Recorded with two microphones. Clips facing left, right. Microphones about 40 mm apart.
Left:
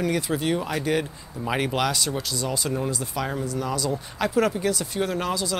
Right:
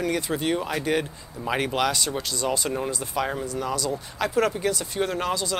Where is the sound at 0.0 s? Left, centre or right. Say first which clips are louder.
Left 1 dB; centre.